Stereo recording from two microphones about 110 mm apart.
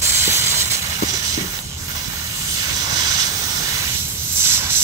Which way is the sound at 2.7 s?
35° right (ahead or behind).